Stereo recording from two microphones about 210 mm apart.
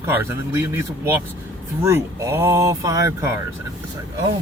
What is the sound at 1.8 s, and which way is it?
Speech, 15° right (ahead or behind).